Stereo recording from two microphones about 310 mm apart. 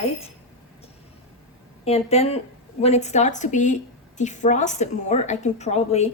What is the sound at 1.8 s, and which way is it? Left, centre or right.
A woman's voice, centre.